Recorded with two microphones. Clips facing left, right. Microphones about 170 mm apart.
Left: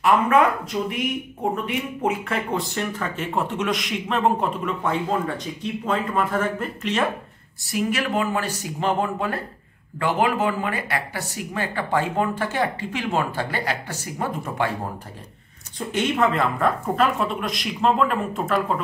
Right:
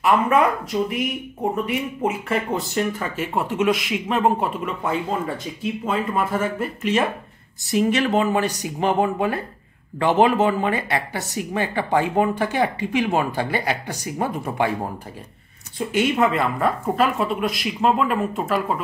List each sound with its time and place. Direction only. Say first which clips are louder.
0.0 s speech: even; centre (ahead or behind)
7.6 s speech: right 5 dB; 25° right (ahead or behind)
15.9 s speech: right 2 dB; 5° right (ahead or behind)